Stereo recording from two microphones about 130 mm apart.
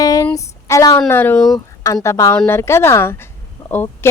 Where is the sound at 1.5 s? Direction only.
25° left (ahead or behind).